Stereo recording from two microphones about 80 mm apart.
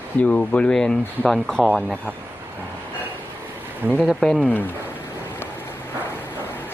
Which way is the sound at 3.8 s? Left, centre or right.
Centre.